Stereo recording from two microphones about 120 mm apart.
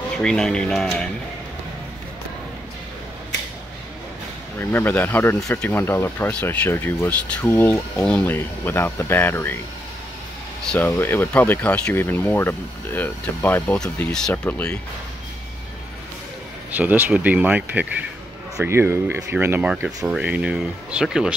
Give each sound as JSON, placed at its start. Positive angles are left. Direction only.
{"t": 0.2, "sound": "speech", "side_deg": 5}
{"t": 4.6, "sound": "speech", "side_deg": 20}
{"t": 7.9, "sound": "speech", "side_deg": 10}
{"t": 10.7, "sound": "speech", "side_deg": 15}
{"t": 16.7, "sound": "speech", "side_deg": -15}